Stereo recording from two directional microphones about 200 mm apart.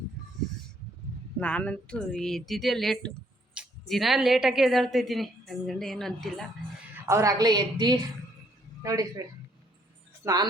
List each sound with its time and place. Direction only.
1.4 s speech: 5° left (ahead or behind)
7.0 s a woman's voice: 15° right (ahead or behind)